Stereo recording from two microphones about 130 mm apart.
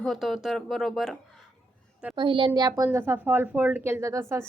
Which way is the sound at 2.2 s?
40° right (ahead or behind).